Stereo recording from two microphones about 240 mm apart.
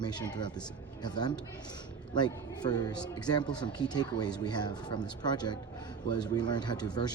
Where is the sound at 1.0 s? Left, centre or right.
Centre.